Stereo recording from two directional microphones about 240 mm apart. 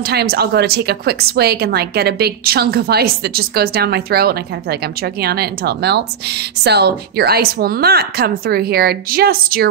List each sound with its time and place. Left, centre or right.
0.0 s a woman's voice: right